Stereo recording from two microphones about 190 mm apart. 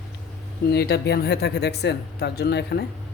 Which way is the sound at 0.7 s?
60° left (ahead or behind).